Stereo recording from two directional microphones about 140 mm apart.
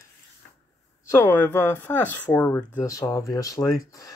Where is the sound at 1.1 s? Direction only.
15° left (ahead or behind).